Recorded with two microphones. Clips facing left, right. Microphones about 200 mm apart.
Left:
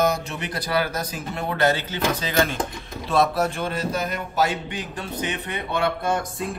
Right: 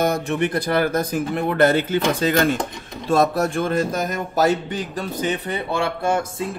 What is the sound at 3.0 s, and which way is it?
A man's voice, 45° right (ahead or behind).